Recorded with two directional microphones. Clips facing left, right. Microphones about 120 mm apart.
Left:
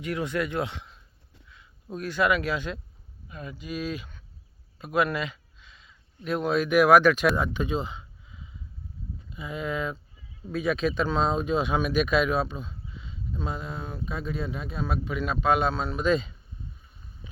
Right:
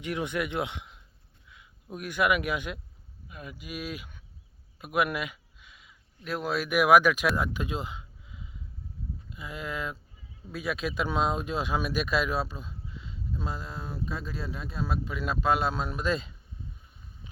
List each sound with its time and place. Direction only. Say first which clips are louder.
0.0 s speech: left 2 dB; 20° right (ahead or behind)
9.3 s speech: left 5 dB; centre (ahead or behind)